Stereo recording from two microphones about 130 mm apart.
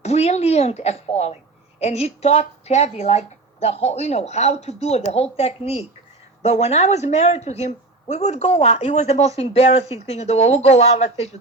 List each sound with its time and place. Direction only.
0.0 s a woman's voice: 55° left (ahead or behind)